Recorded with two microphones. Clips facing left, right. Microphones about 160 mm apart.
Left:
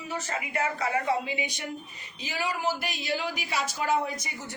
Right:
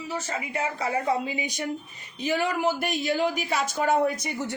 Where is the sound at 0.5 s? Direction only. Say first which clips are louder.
Right 1 dB; 35° right (ahead or behind).